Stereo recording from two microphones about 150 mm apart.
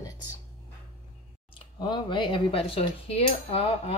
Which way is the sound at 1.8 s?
30° left (ahead or behind).